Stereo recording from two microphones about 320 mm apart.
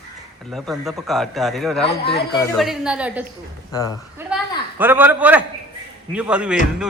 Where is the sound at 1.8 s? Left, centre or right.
Left.